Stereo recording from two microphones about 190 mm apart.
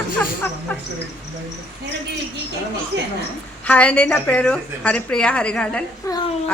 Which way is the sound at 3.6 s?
5° left (ahead or behind).